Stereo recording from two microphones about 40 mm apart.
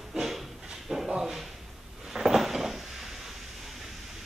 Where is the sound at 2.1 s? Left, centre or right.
Centre.